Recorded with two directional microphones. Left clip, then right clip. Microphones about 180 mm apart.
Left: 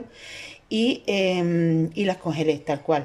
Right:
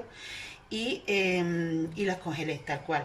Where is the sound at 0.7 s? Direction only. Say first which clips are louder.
Left 6 dB; 50° left (ahead or behind).